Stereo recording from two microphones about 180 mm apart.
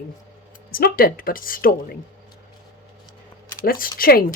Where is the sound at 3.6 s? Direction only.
55° left (ahead or behind).